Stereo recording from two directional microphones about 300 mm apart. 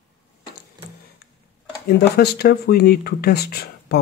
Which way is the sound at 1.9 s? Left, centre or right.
Left.